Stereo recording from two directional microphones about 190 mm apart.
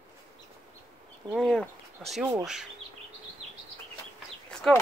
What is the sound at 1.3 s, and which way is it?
Speech, centre (ahead or behind).